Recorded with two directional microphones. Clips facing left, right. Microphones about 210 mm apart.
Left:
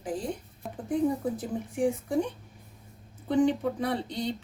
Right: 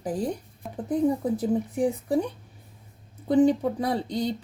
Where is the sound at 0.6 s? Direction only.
Centre (ahead or behind).